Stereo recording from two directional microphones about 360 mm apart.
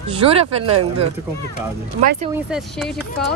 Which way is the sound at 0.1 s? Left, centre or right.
Centre.